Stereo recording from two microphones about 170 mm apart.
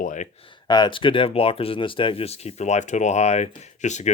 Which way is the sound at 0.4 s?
25° left (ahead or behind).